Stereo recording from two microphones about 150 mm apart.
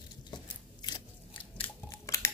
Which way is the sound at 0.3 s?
30° left (ahead or behind).